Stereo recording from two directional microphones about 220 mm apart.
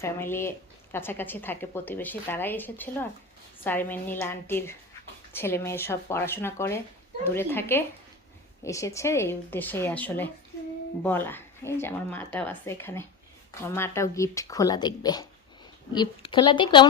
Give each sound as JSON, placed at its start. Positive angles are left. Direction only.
{"t": 0.0, "sound": "a woman's voice", "side_deg": 10}